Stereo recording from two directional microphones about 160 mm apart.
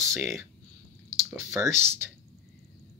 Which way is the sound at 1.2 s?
15° right (ahead or behind).